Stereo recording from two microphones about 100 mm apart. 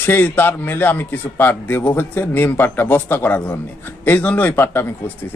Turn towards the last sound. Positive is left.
turn(degrees=20)  # may be behind; listen again after turning